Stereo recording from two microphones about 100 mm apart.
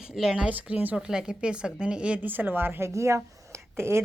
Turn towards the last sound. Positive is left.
turn(degrees=-25)  # may be behind; listen again after turning